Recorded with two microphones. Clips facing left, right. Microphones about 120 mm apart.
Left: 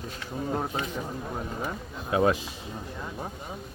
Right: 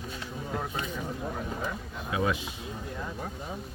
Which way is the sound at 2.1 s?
45° left (ahead or behind).